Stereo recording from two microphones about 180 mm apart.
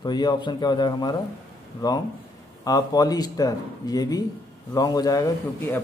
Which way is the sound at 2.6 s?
20° left (ahead or behind).